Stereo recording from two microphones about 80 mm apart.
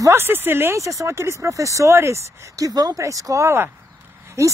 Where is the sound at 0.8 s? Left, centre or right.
Right.